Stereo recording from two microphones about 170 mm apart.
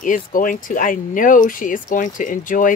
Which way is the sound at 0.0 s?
50° left (ahead or behind).